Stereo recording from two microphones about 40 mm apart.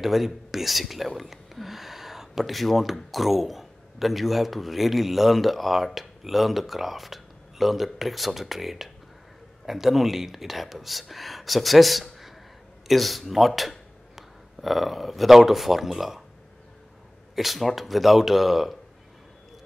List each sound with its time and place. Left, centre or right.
0.0 s speech: centre
17.4 s speech: centre